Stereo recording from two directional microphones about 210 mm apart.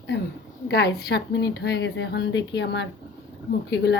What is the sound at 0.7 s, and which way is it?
A woman's voice, 50° left (ahead or behind).